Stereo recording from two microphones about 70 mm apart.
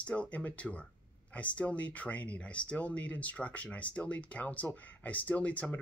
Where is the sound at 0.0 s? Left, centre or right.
Centre.